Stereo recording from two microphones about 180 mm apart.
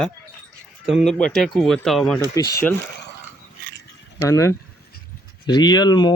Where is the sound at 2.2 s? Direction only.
20° left (ahead or behind).